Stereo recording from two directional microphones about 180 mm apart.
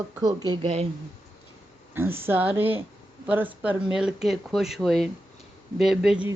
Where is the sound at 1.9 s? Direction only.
15° right (ahead or behind).